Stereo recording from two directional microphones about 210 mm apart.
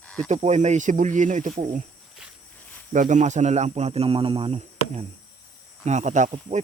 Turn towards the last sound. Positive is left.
turn(degrees=-30)  # may be behind; listen again after turning